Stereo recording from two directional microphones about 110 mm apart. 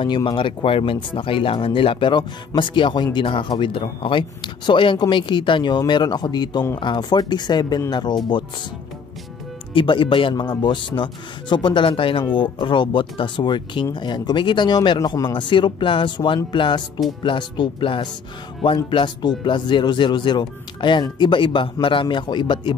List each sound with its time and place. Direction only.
0.0 s speech: 45° left (ahead or behind)
3.3 s speech: 55° left (ahead or behind)
9.8 s speech: 50° left (ahead or behind)